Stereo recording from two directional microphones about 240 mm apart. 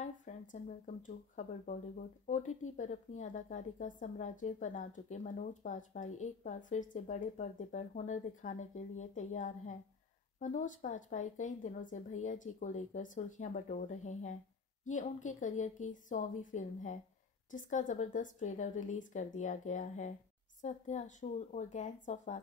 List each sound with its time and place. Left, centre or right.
0.0 s speech: left